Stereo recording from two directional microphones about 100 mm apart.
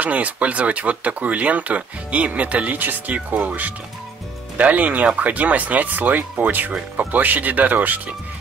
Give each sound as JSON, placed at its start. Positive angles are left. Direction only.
{"t": 0.0, "sound": "speech", "side_deg": -15}